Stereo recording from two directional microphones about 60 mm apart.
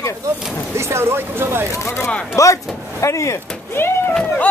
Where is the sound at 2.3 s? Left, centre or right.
Left.